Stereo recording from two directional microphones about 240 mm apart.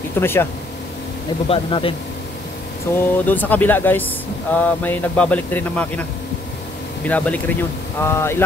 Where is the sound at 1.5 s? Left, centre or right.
Left.